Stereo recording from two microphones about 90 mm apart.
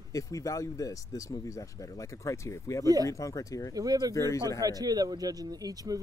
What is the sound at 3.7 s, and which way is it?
Speech, 45° right (ahead or behind).